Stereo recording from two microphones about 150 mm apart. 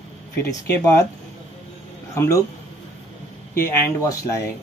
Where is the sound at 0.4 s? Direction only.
15° left (ahead or behind).